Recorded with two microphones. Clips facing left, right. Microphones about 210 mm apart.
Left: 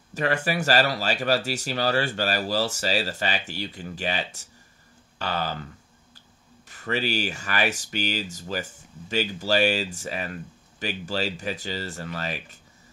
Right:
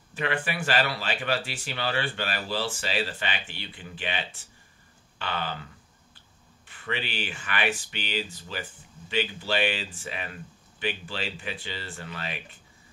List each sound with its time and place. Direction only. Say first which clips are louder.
0.1 s speech: left 5 dB; 40° left (ahead or behind)
6.7 s speech: left 7 dB; 40° left (ahead or behind)